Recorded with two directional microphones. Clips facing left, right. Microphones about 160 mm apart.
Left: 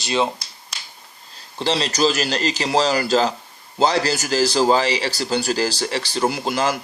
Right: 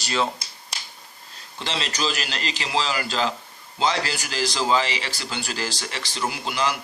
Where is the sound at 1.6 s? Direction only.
35° left (ahead or behind).